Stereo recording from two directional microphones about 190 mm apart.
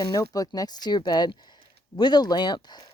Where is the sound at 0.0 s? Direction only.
20° left (ahead or behind).